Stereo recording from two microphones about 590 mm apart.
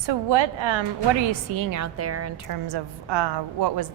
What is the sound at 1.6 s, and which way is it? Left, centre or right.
A woman's voice, right.